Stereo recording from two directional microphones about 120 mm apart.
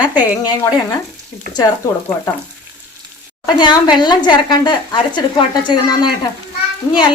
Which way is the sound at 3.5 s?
40° left (ahead or behind).